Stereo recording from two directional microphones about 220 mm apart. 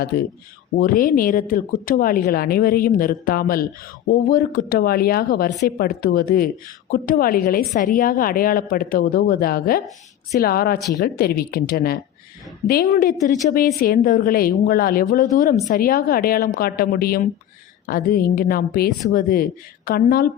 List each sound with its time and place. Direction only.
0.8 s a woman's voice: 40° left (ahead or behind)
10.8 s speech: 15° left (ahead or behind)
11.0 s a woman's voice: 45° left (ahead or behind)